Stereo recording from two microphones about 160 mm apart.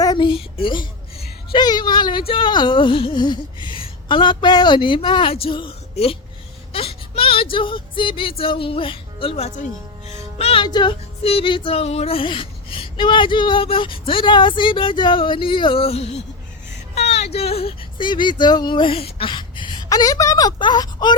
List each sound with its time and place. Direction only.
0.0 s a sound: 25° left (ahead or behind)
2.3 s music: 30° left (ahead or behind)
6.7 s whimper: 35° left (ahead or behind)
7.5 s music: 30° left (ahead or behind)
16.9 s a sound: 40° left (ahead or behind)
17.3 s speech: 40° left (ahead or behind)